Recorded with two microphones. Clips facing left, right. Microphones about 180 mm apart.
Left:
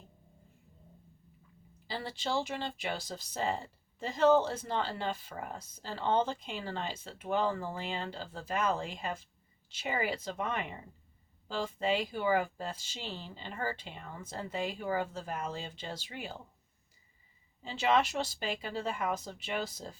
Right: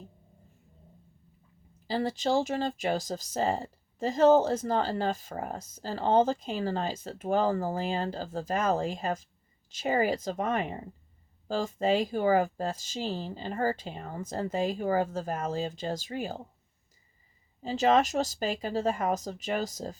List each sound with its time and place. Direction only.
1.9 s speech: 45° right (ahead or behind)
17.6 s speech: 40° right (ahead or behind)